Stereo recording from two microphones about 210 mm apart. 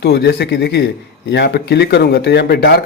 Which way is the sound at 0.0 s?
50° left (ahead or behind).